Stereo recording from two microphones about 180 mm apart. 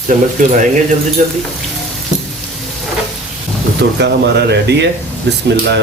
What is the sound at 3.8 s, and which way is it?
Speech, 70° right (ahead or behind).